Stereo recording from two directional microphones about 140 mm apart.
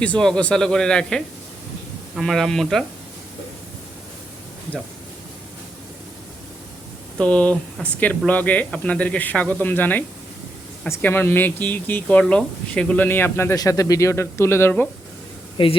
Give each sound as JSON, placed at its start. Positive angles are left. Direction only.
{"t": 0.0, "sound": "speech", "side_deg": 5}
{"t": 7.2, "sound": "speech", "side_deg": 10}
{"t": 15.6, "sound": "speech", "side_deg": 40}